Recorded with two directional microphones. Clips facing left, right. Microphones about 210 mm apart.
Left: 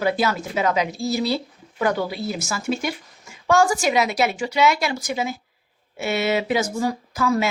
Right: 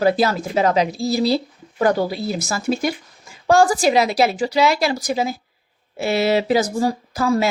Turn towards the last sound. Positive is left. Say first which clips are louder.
# right 3 dB
turn(degrees=-35)  # may be behind; listen again after turning